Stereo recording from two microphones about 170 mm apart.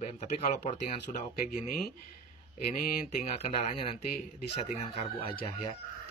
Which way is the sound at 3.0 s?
40° left (ahead or behind).